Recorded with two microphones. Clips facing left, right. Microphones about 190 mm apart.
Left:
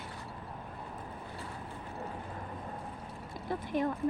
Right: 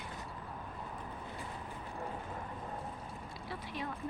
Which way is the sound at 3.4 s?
50° left (ahead or behind).